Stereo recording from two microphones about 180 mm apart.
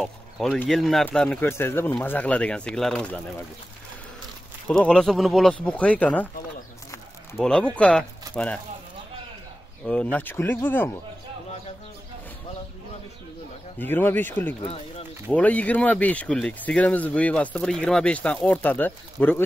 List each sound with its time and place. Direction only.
0.0 s speech: centre (ahead or behind)
4.6 s speech: 5° left (ahead or behind)
7.3 s speech: 5° left (ahead or behind)
9.8 s speech: 10° left (ahead or behind)
13.7 s speech: 10° left (ahead or behind)
14.6 s speech: 35° left (ahead or behind)
15.3 s speech: 10° left (ahead or behind)